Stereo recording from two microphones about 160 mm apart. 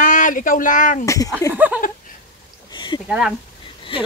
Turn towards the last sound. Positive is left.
turn(degrees=35)  # may be behind; listen again after turning